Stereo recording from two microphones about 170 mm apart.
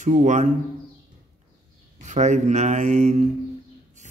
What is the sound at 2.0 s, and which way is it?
Speech, 45° right (ahead or behind).